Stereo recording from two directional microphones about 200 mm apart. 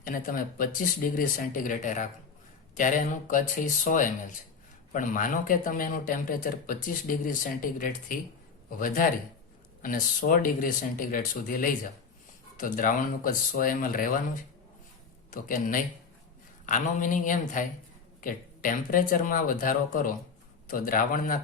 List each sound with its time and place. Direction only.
0.0 s speech: 45° left (ahead or behind)
9.8 s speech: 45° left (ahead or behind)